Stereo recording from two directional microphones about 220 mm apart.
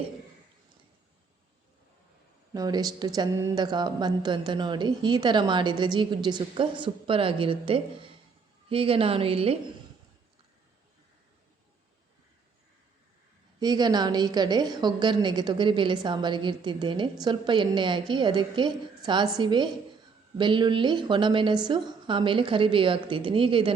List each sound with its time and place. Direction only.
2.5 s a woman's voice: 15° right (ahead or behind)
13.6 s a woman's voice: 20° right (ahead or behind)